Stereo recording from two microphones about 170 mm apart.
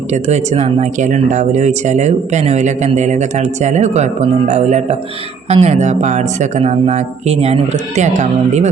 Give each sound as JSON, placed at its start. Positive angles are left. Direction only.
{"t": 0.1, "sound": "speech", "side_deg": -40}